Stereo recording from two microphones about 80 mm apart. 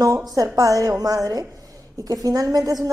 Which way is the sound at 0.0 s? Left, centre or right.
Right.